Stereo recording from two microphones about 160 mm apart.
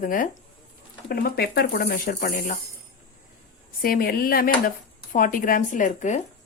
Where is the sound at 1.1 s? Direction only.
70° left (ahead or behind).